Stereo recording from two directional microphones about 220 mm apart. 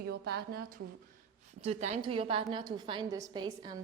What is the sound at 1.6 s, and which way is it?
A woman's voice, 30° right (ahead or behind).